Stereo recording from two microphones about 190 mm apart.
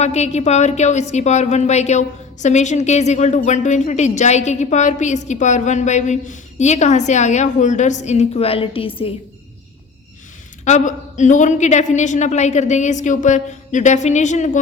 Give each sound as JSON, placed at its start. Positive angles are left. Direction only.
{"t": 0.0, "sound": "a woman's voice", "side_deg": 35}
{"t": 10.7, "sound": "a woman's voice", "side_deg": 40}